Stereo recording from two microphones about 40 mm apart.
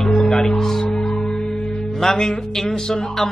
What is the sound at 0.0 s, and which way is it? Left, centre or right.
Music, centre.